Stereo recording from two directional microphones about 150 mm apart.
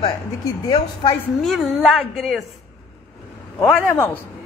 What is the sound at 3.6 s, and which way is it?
Speech, 15° left (ahead or behind).